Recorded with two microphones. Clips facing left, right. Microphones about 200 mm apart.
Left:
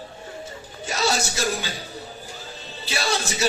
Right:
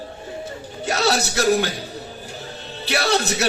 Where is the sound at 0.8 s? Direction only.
65° right (ahead or behind).